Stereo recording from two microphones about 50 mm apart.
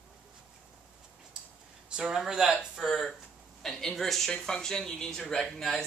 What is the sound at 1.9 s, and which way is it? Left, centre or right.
Speech, centre.